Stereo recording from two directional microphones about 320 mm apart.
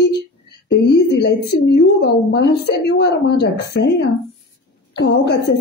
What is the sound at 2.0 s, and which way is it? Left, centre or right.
A woman's voice, left.